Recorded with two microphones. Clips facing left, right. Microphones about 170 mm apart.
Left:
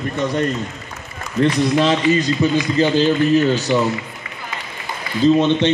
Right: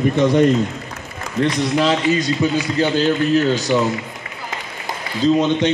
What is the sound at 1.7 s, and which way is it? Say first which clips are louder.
Speech: left 1 dB; 5° right (ahead or behind).